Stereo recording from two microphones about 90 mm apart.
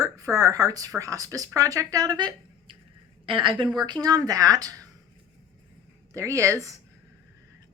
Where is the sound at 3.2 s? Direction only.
75° right (ahead or behind).